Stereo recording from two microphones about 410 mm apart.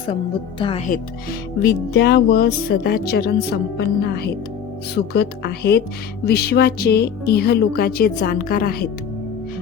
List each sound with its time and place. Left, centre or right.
0.6 s speech: centre